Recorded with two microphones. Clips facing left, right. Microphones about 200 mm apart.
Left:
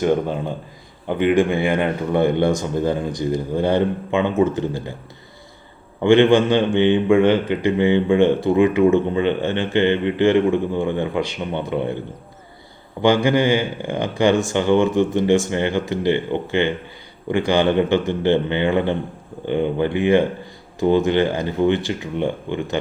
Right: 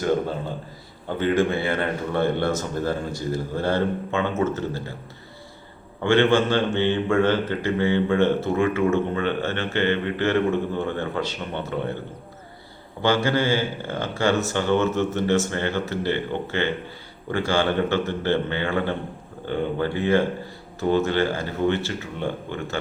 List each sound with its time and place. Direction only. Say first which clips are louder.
0.0 s a man's voice: left 4 dB; 15° left (ahead or behind)
6.0 s a man's voice: left 5 dB; 15° left (ahead or behind)
13.0 s a man's voice: left 5 dB; 15° left (ahead or behind)